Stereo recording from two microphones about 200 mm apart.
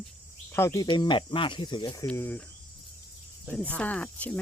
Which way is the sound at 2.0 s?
10° left (ahead or behind).